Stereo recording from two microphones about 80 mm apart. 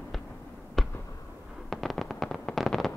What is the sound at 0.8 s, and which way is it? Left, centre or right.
Fireworks, centre.